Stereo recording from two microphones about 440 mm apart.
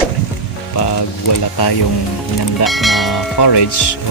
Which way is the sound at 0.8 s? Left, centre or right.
Left.